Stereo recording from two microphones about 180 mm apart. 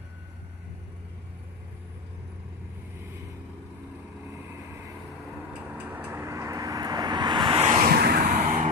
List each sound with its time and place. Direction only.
5.8 s vehicle: 10° right (ahead or behind); by 7.7 s 30° right (ahead or behind)
7.7 s vehicle: 55° right (ahead or behind)
8.2 s vehicle: 40° right (ahead or behind)